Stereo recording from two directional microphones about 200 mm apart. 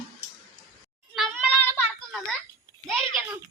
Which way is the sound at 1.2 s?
5° right (ahead or behind).